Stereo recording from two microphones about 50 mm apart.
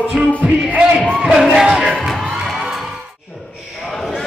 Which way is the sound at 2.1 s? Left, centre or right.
Centre.